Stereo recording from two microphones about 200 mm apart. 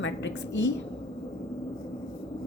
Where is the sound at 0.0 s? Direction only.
65° left (ahead or behind).